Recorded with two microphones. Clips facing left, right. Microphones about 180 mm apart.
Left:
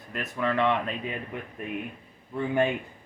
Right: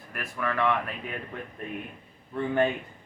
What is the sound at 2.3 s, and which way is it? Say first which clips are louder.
Speech: even; 15° left (ahead or behind).